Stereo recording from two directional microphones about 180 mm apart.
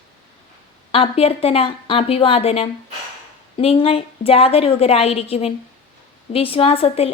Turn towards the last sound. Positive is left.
turn(degrees=35)  # may be behind; listen again after turning